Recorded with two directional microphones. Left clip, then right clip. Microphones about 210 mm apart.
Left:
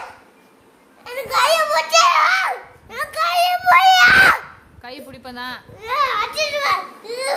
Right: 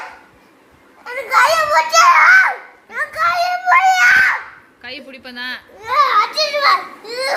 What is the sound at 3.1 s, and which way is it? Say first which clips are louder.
Child singing: right 1 dB; 20° left (ahead or behind).